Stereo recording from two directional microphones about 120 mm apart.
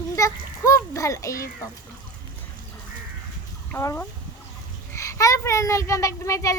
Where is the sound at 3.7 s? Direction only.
20° left (ahead or behind).